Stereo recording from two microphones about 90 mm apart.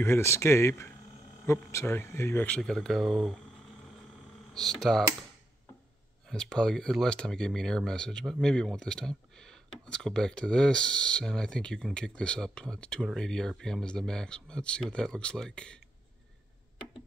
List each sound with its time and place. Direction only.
0.0 s speech: 30° left (ahead or behind)
2.4 s speech: 10° left (ahead or behind)
4.6 s speech: 5° left (ahead or behind)
6.3 s speech: 5° left (ahead or behind)